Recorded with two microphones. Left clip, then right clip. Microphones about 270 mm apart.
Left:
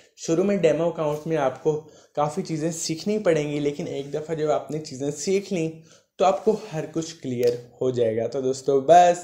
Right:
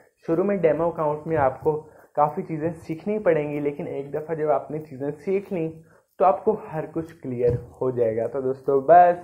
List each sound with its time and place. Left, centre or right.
0.2 s speech: left